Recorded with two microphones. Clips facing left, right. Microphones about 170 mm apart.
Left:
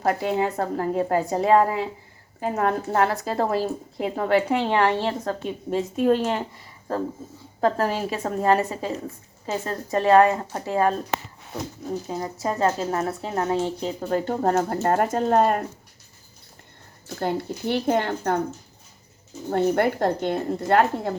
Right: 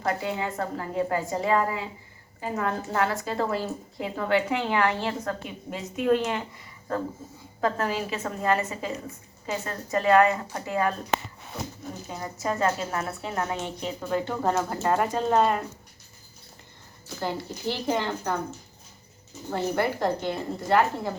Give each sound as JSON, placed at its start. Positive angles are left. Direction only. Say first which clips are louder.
{"t": 0.0, "sound": "a woman's voice", "louder": "left 6 dB", "side_deg": 55}
{"t": 7.6, "sound": "speech", "louder": "left 4 dB", "side_deg": 35}
{"t": 12.0, "sound": "speech", "louder": "even", "side_deg": 30}
{"t": 17.2, "sound": "a woman's voice", "louder": "left 5 dB", "side_deg": 55}
{"t": 19.5, "sound": "a woman's voice", "louder": "left 5 dB", "side_deg": 55}